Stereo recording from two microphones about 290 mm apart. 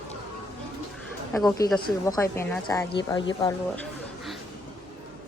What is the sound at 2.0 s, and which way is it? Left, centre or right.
A woman's voice, centre.